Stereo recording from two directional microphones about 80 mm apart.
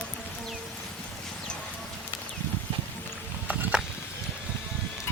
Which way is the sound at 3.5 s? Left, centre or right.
Centre.